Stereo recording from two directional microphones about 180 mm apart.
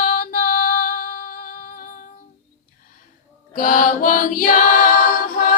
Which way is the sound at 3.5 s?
50° left (ahead or behind).